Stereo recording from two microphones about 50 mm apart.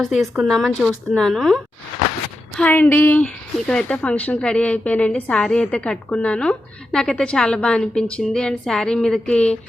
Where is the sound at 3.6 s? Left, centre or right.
Centre.